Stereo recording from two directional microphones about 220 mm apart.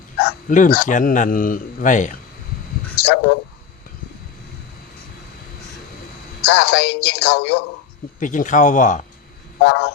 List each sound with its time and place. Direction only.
0.4 s a man's voice: 35° left (ahead or behind)
3.0 s a sound: 50° left (ahead or behind)
6.4 s speech: 50° left (ahead or behind)
8.2 s a man's voice: 35° left (ahead or behind)
9.6 s speech: 55° left (ahead or behind)